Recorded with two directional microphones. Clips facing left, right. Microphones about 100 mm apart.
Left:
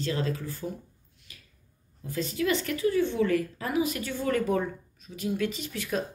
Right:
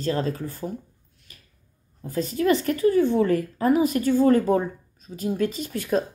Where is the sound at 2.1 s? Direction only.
40° right (ahead or behind).